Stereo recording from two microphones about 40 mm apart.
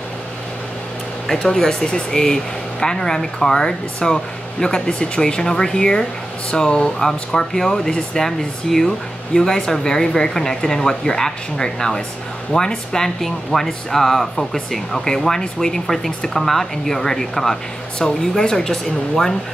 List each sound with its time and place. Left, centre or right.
1.2 s speech: centre